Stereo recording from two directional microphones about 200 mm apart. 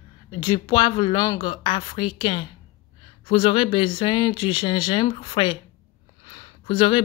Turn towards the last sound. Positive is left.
turn(degrees=25)  # may be behind; listen again after turning